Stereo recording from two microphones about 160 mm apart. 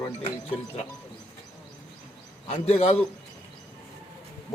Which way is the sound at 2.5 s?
40° left (ahead or behind).